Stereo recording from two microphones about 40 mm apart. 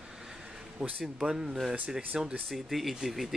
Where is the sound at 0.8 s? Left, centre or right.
Right.